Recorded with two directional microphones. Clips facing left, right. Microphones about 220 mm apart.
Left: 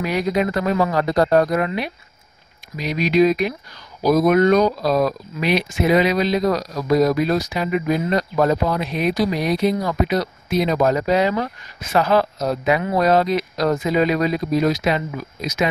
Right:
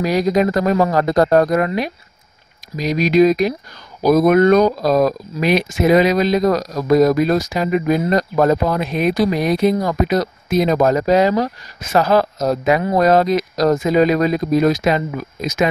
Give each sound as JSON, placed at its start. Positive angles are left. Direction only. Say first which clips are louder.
{"t": 0.0, "sound": "speech", "louder": "right 4 dB", "side_deg": -40}
{"t": 4.0, "sound": "speech", "louder": "right 3 dB", "side_deg": -55}